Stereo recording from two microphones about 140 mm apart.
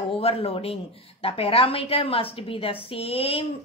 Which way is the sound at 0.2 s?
45° left (ahead or behind).